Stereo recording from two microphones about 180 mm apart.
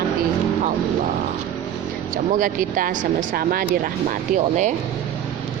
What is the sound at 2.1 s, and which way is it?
Speech, 50° right (ahead or behind).